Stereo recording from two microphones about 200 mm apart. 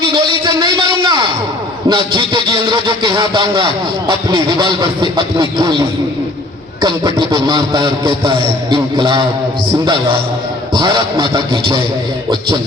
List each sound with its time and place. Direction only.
0.1 s a sound: 20° right (ahead or behind)
1.9 s speech: 25° right (ahead or behind)
6.8 s speech: 20° right (ahead or behind)
10.8 s speech: 20° right (ahead or behind)